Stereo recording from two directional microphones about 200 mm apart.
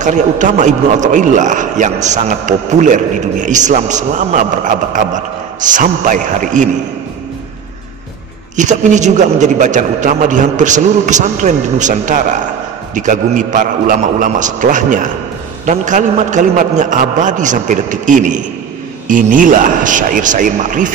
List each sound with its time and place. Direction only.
0.0 s a man's voice: 35° right (ahead or behind)
8.5 s a man's voice: 35° right (ahead or behind)